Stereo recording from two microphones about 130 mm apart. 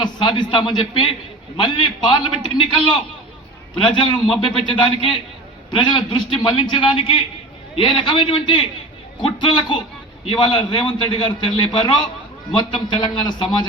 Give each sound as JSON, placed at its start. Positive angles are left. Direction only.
{"t": 0.0, "sound": "a man's voice", "side_deg": 35}
{"t": 3.9, "sound": "a man's voice", "side_deg": 40}